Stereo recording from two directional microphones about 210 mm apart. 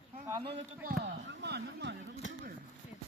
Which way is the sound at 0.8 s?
55° right (ahead or behind).